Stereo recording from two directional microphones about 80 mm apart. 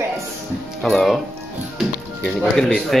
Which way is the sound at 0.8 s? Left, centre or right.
Centre.